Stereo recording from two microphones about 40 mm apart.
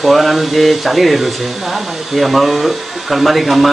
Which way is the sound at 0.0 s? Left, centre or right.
Centre.